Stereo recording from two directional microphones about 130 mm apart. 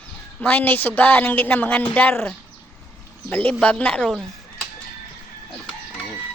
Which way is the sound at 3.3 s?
15° left (ahead or behind).